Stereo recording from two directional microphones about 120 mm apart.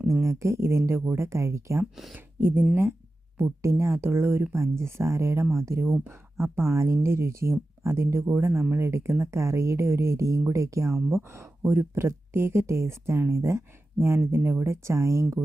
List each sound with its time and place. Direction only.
0.1 s speech: 25° right (ahead or behind)
1.8 s speech: centre (ahead or behind)
2.1 s speech: 15° right (ahead or behind)